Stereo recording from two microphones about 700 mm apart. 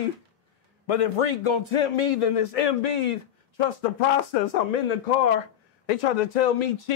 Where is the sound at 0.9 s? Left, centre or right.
Left.